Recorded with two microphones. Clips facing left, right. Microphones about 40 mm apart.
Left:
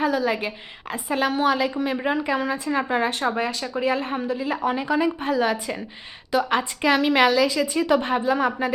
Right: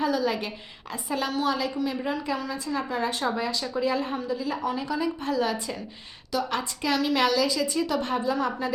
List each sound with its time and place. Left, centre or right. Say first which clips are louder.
0.0 s a woman's voice: left 3 dB; left
1.1 s a woman's voice: left 5 dB; left